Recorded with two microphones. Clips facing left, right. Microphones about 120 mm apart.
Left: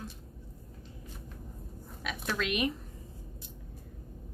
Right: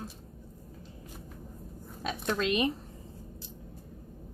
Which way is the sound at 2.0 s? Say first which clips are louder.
Right 4 dB; 30° right (ahead or behind).